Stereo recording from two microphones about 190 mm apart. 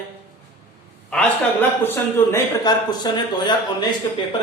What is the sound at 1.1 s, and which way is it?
A man's voice, 5° left (ahead or behind).